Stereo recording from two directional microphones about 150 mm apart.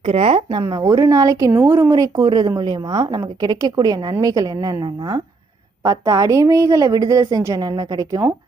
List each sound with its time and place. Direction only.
0.0 s speech: 40° right (ahead or behind)
0.5 s speech: 25° right (ahead or behind)